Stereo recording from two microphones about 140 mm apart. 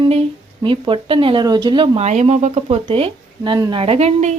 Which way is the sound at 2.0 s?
50° right (ahead or behind).